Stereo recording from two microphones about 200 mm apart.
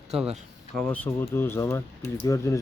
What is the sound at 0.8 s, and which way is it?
Speech, 5° left (ahead or behind).